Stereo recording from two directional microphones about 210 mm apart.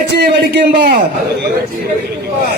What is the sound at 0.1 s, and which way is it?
Speech, 50° right (ahead or behind).